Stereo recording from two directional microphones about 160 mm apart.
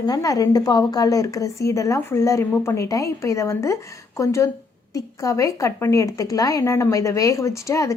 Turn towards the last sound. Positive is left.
turn(degrees=20)  # may be behind; listen again after turning